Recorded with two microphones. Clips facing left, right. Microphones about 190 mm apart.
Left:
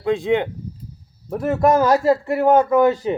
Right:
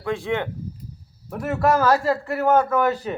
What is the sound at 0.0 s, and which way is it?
Speech, 20° left (ahead or behind).